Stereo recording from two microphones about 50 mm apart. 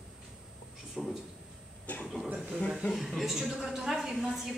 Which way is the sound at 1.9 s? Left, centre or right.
Left.